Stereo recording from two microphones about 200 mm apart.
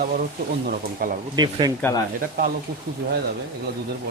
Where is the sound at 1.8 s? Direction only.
15° left (ahead or behind).